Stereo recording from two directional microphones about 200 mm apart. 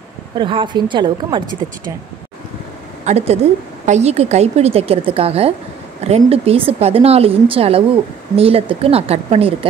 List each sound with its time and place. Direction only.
0.4 s speech: 25° right (ahead or behind)
3.1 s a woman's voice: 35° right (ahead or behind)